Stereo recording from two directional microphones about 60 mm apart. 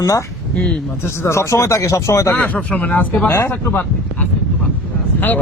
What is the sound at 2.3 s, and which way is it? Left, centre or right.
Speech, left.